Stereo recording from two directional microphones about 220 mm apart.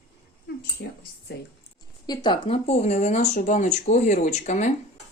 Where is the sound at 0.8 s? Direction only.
50° left (ahead or behind).